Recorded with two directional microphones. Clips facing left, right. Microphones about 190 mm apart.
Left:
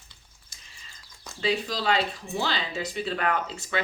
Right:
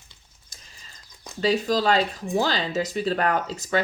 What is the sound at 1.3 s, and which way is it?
Speech, 45° right (ahead or behind).